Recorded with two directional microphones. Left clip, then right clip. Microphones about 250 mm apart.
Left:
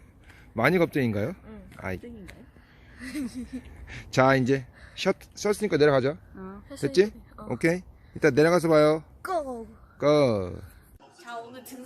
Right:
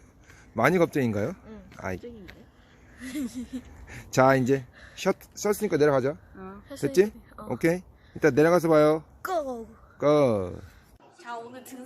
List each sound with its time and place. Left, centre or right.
0.5 s speech: centre
1.7 s a sound: centre
3.0 s speech: centre
6.3 s speech: left
6.7 s a woman's voice: centre